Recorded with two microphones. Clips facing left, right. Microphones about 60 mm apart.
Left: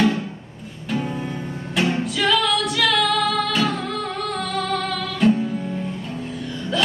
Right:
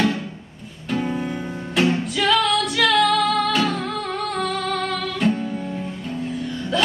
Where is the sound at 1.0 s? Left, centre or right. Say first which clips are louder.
Right 3 dB; centre.